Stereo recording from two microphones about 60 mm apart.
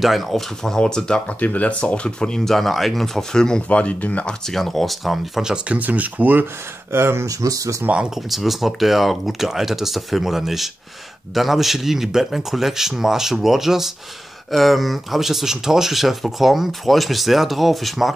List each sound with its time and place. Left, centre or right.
0.0 s speech: centre
0.7 s speech: centre
1.4 s speech: left
3.6 s speech: left
4.3 s speech: centre
5.7 s speech: right
6.9 s speech: right
7.2 s speech: right
8.3 s speech: centre